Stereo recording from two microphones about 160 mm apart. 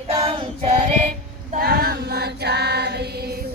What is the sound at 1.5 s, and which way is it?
Female singing, 75° right (ahead or behind).